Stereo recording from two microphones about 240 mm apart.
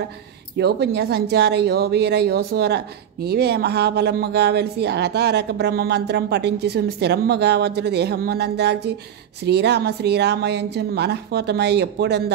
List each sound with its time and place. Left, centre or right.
0.6 s speech: right